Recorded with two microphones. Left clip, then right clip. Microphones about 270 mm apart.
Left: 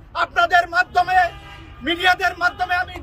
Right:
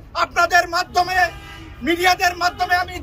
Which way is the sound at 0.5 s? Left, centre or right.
Left.